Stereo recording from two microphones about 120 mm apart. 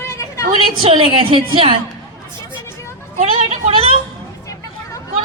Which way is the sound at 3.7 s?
50° right (ahead or behind).